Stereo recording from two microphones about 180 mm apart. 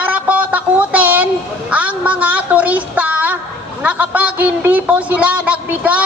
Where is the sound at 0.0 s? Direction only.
10° right (ahead or behind).